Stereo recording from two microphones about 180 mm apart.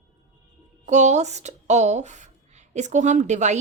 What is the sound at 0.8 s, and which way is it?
A woman's voice, 40° right (ahead or behind).